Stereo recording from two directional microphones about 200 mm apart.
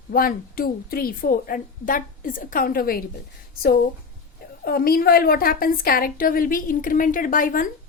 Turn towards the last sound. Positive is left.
turn(degrees=45)  # may be behind; listen again after turning